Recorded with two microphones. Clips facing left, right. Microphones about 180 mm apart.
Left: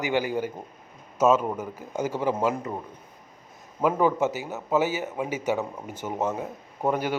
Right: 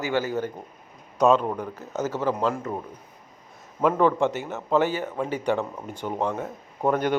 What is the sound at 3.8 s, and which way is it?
A man's voice, 5° left (ahead or behind).